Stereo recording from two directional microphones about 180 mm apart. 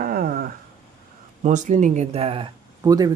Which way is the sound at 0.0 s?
55° right (ahead or behind).